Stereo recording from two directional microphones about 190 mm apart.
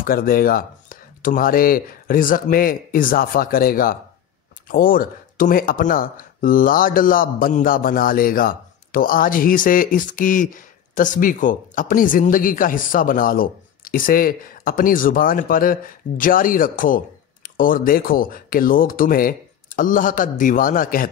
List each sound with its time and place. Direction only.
0.0 s speech: 50° left (ahead or behind)